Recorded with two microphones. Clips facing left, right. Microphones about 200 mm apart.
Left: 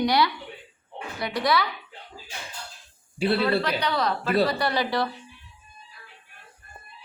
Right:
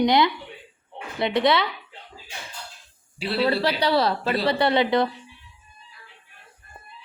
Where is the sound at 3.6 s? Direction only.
30° right (ahead or behind).